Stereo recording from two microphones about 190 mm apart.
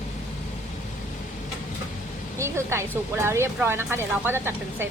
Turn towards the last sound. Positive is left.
turn(degrees=-10)  # may be behind; listen again after turning